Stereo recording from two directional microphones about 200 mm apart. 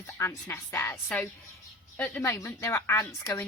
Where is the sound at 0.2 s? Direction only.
15° left (ahead or behind).